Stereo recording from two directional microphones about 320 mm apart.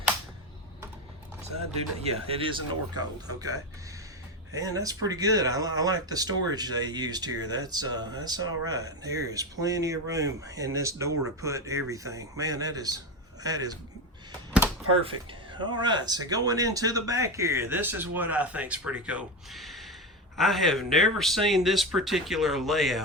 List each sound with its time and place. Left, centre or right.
2.0 s speech: centre
4.5 s speech: centre
14.8 s speech: centre